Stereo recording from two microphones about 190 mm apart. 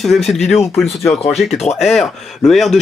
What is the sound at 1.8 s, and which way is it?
Speech, centre (ahead or behind).